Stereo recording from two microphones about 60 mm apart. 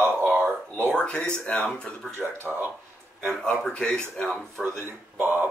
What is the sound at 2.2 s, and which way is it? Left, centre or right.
Speech, right.